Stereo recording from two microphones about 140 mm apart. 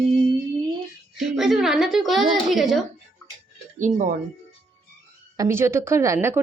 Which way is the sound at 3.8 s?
65° right (ahead or behind).